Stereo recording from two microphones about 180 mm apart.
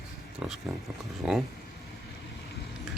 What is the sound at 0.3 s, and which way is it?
Speech, centre (ahead or behind).